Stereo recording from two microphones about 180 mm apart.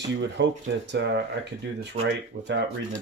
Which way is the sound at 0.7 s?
90° right.